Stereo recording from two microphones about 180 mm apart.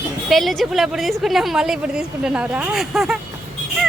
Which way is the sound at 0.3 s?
Centre (ahead or behind).